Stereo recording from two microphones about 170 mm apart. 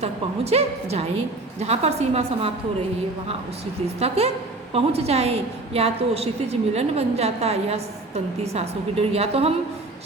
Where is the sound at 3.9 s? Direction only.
35° right (ahead or behind).